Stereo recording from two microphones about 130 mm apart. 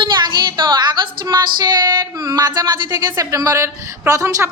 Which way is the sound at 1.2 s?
35° right (ahead or behind).